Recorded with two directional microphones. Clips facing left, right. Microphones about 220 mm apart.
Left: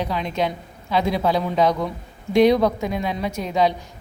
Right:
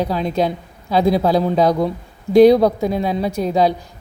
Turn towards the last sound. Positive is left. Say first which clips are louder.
# right 4 dB
turn(degrees=-35)  # may be behind; listen again after turning